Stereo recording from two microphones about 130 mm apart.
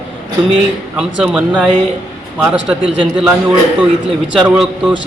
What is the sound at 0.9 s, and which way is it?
A man's voice, 10° right (ahead or behind).